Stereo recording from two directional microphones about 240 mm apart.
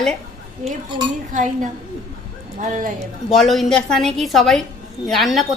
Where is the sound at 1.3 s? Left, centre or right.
Right.